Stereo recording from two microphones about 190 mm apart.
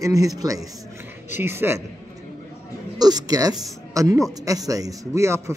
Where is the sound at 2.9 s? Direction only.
20° right (ahead or behind).